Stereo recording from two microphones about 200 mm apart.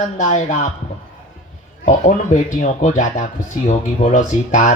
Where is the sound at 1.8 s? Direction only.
35° left (ahead or behind).